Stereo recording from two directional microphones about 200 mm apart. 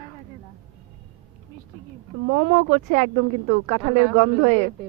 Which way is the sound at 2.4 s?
35° right (ahead or behind).